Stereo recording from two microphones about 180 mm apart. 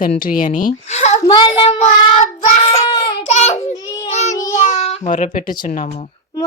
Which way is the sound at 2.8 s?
25° left (ahead or behind).